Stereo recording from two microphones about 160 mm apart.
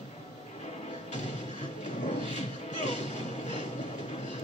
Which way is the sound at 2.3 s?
45° left (ahead or behind).